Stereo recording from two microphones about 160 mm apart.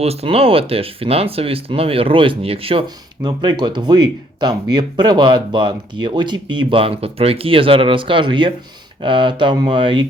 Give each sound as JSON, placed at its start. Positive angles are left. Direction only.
{"t": 0.0, "sound": "speech", "side_deg": -40}